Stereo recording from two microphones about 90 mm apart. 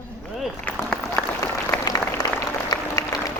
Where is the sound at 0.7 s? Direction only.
35° left (ahead or behind).